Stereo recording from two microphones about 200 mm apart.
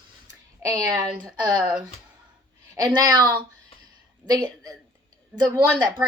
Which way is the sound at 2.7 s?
20° right (ahead or behind).